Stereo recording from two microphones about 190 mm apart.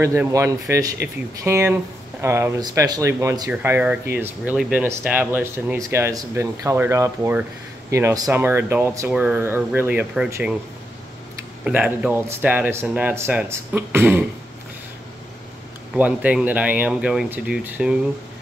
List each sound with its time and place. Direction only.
0.0 s speech: 15° right (ahead or behind)
11.6 s speech: 5° right (ahead or behind)
15.9 s speech: 5° right (ahead or behind)